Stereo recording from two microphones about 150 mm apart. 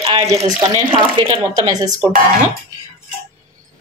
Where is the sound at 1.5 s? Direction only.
25° right (ahead or behind).